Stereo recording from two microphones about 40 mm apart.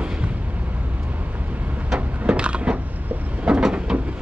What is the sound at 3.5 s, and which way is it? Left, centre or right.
Vehicle, centre.